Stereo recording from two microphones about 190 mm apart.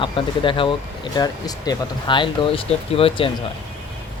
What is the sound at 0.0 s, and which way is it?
Speech, 25° left (ahead or behind).